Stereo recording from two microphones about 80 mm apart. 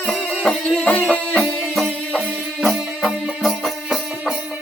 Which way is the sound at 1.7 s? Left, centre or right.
Centre.